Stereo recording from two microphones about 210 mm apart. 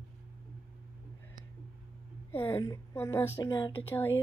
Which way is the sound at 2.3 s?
20° left (ahead or behind).